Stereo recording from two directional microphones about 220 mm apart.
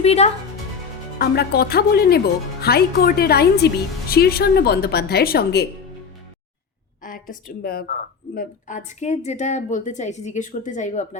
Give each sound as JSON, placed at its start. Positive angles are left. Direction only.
{"t": 0.0, "sound": "speech", "side_deg": 30}
{"t": 1.2, "sound": "speech", "side_deg": 45}
{"t": 7.0, "sound": "a woman's voice", "side_deg": 40}